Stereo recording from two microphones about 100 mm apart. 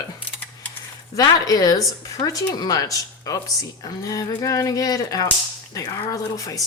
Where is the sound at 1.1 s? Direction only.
40° left (ahead or behind).